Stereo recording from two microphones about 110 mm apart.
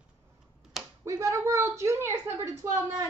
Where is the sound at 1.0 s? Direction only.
30° right (ahead or behind).